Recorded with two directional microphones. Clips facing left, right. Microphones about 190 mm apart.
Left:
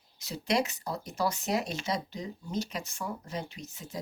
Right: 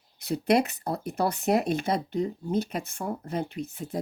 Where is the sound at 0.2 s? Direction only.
60° right (ahead or behind).